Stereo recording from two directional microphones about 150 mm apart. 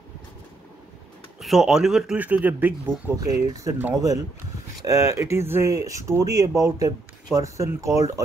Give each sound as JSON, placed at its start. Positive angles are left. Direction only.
{"t": 1.4, "sound": "speech", "side_deg": 0}
{"t": 3.3, "sound": "speech", "side_deg": -20}